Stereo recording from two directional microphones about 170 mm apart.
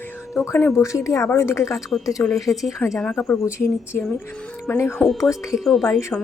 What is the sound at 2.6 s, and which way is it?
A woman's voice, 20° left (ahead or behind).